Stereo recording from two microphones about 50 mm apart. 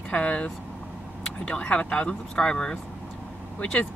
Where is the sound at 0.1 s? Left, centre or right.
Left.